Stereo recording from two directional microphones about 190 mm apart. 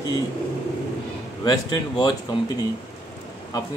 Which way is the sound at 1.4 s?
20° left (ahead or behind).